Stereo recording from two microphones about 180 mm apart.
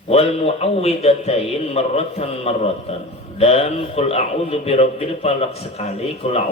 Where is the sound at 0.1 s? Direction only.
35° left (ahead or behind).